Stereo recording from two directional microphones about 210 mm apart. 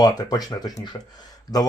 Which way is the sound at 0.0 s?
20° left (ahead or behind).